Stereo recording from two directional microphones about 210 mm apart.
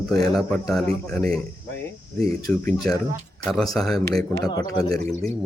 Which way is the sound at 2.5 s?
5° left (ahead or behind).